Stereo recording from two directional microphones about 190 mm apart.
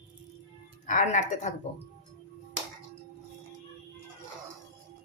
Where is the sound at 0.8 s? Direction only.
45° left (ahead or behind).